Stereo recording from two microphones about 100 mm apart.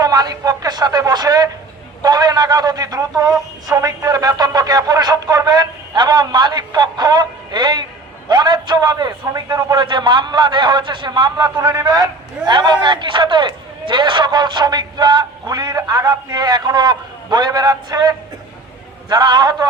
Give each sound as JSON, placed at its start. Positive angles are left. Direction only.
{"t": 0.0, "sound": "a man's voice", "side_deg": -40}
{"t": 9.8, "sound": "a man's voice", "side_deg": -50}